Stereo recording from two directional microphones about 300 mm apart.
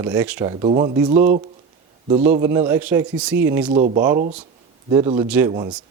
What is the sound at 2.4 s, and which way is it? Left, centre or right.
Speech, centre.